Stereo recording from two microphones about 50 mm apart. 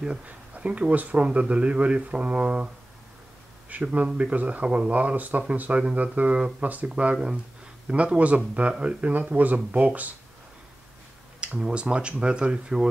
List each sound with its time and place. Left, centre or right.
0.0 s speech: centre
11.4 s speech: centre